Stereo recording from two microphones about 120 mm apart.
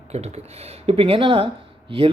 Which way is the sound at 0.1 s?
60° right (ahead or behind).